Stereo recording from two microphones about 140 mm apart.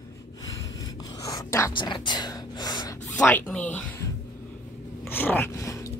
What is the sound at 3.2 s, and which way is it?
Speech, 10° left (ahead or behind).